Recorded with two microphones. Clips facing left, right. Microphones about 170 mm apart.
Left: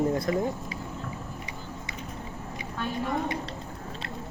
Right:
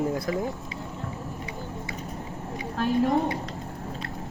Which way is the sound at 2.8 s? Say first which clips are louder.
Right 7 dB; 40° right (ahead or behind).